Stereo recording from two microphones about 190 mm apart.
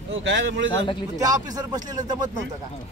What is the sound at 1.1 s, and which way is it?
Speech, 20° right (ahead or behind).